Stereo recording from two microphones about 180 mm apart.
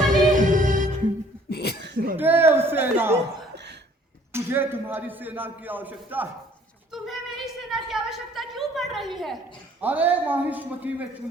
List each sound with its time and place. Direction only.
0.3 s music: 45° right (ahead or behind)
1.5 s cough: 65° left (ahead or behind)
1.8 s a sound: 65° right (ahead or behind)
2.1 s a man's voice: 10° right (ahead or behind)
3.5 s cough: 70° right (ahead or behind)
4.3 s a man's voice: 15° right (ahead or behind)